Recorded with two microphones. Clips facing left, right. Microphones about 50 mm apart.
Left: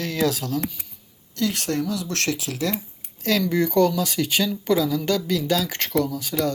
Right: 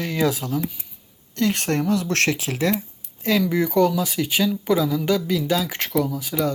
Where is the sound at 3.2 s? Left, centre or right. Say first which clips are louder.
Right 1 dB; centre.